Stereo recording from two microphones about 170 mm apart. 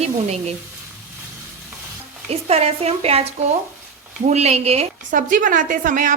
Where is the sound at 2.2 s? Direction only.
35° right (ahead or behind).